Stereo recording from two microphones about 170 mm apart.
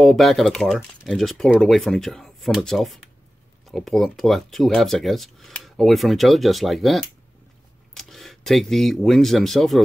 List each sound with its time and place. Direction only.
0.0 s speech: centre (ahead or behind)